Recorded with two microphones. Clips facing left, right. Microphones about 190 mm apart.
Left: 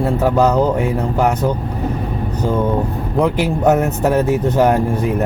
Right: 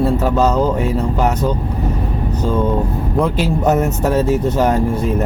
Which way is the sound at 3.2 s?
15° left (ahead or behind).